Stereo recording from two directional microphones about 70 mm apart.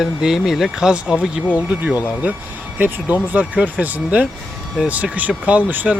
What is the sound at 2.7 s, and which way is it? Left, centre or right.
Speech, right.